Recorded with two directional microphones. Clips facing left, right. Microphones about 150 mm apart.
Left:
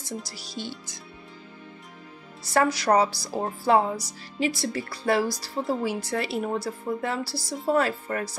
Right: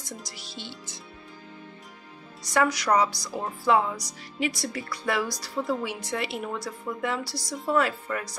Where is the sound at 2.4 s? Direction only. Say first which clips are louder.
Left 2 dB; 30° left (ahead or behind).